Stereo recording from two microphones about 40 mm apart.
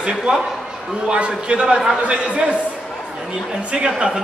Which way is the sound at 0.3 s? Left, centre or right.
Right.